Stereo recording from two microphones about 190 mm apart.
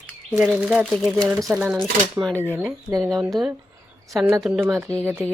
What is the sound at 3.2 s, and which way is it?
Speech, centre (ahead or behind).